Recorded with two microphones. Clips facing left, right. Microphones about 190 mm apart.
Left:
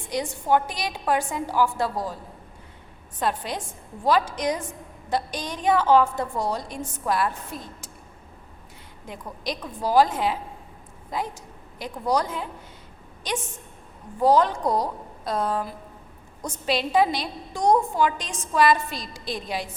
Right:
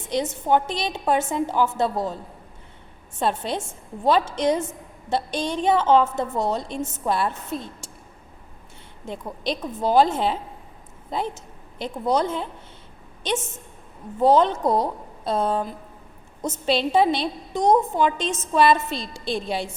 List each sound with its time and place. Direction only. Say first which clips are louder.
0.0 s a woman's voice: right 3 dB; 20° right (ahead or behind)
3.2 s a woman's voice: right 3 dB; 25° right (ahead or behind)
9.0 s a woman's voice: right 4 dB; 25° right (ahead or behind)